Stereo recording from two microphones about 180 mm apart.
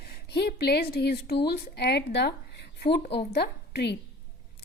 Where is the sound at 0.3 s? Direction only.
65° left (ahead or behind).